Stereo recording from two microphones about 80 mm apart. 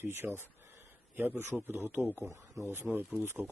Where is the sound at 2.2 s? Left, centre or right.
Right.